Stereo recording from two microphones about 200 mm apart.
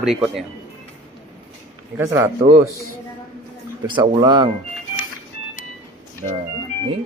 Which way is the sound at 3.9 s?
25° right (ahead or behind).